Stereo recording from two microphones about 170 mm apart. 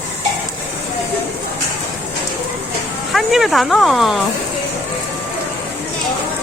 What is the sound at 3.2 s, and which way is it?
Speech, centre (ahead or behind).